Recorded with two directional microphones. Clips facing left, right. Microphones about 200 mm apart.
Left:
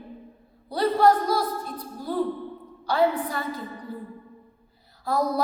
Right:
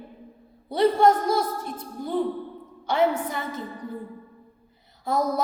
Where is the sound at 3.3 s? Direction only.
20° right (ahead or behind).